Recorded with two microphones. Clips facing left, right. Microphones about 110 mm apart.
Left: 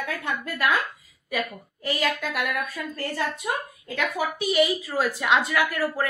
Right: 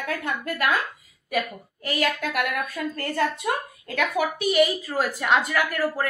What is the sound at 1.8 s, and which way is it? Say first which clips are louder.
Speech: right 1 dB; 50° right (ahead or behind).